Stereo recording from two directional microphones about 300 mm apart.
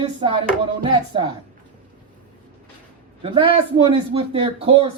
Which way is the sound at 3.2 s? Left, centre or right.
Centre.